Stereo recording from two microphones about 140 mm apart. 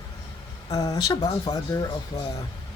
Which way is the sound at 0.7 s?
25° left (ahead or behind).